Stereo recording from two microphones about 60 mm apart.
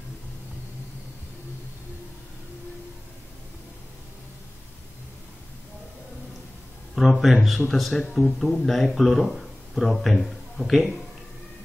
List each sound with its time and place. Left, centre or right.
7.0 s speech: centre